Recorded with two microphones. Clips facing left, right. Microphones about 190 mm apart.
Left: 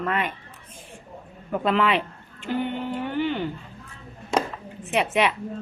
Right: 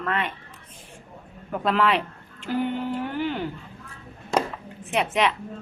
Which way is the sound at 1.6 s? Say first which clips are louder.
Even; centre (ahead or behind).